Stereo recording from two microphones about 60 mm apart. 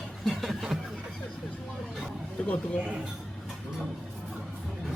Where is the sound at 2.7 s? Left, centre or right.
Centre.